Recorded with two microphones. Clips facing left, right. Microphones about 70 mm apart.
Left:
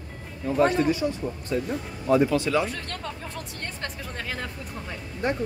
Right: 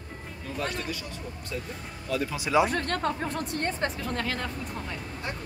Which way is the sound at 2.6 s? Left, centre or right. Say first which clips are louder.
Right 6 dB; right.